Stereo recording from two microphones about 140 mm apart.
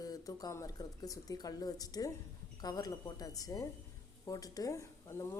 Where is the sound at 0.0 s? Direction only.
25° left (ahead or behind).